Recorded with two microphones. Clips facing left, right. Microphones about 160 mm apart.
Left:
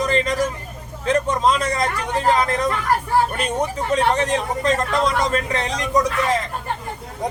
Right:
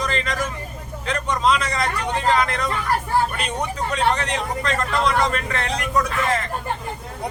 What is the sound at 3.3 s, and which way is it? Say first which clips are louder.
Speech: left 4 dB; 45° left (ahead or behind).